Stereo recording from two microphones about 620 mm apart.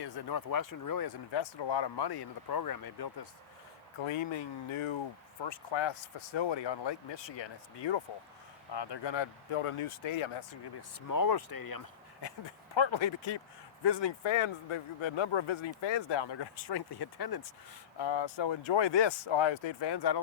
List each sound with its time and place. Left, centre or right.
0.0 s speech: left
4.0 s speech: left
11.1 s speech: left